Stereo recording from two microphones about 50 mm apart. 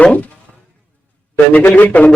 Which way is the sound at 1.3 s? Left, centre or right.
Left.